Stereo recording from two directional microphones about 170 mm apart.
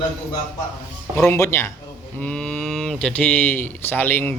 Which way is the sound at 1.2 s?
15° left (ahead or behind).